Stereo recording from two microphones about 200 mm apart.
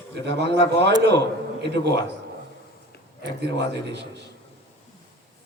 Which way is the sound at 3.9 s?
60° right (ahead or behind).